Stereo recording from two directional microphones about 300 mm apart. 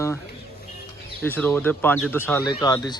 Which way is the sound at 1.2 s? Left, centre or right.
Centre.